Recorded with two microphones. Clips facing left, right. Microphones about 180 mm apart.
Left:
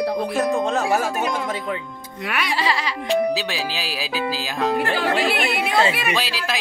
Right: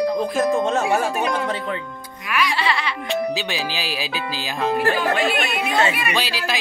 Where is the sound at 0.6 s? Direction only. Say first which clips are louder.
Right 1 dB; centre (ahead or behind).